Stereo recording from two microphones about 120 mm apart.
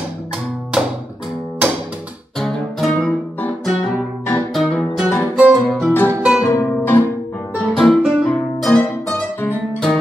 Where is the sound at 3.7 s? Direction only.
5° right (ahead or behind).